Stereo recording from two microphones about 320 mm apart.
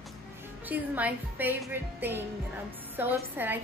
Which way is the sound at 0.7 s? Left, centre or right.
Centre.